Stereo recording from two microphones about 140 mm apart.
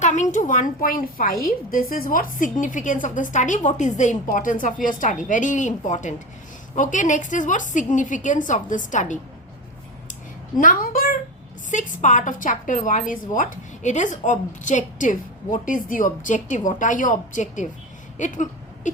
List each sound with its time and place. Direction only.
0.0 s a woman's voice: 60° left (ahead or behind)
10.6 s a woman's voice: 80° left
11.7 s speech: 65° left (ahead or behind)